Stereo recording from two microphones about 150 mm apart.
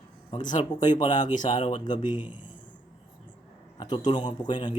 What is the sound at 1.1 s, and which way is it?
Speech, 55° left (ahead or behind).